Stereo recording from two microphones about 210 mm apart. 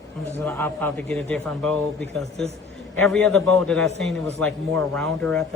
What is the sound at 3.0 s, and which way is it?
Speech, 5° left (ahead or behind).